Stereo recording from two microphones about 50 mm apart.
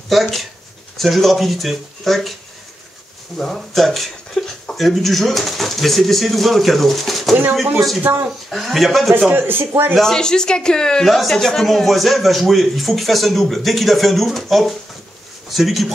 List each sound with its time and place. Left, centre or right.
0.1 s a man's voice: centre
3.3 s a man's voice: centre
8.0 s speech: right
8.3 s a man's voice: centre
9.3 s speech: right
9.9 s a man's voice: centre